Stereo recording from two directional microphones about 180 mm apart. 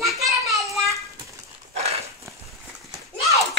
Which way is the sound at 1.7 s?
35° right (ahead or behind).